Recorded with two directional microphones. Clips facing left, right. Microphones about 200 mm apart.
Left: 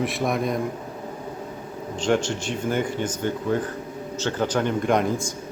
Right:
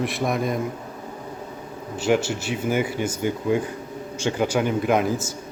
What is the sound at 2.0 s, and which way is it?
Speech, 5° right (ahead or behind).